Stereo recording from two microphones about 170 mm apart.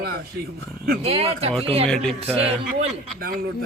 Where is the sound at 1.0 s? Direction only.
35° right (ahead or behind).